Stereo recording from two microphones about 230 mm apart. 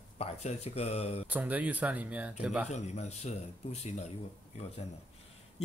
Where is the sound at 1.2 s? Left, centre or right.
Centre.